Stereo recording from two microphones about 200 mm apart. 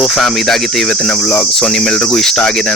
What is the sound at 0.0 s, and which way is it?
Cricket, centre (ahead or behind).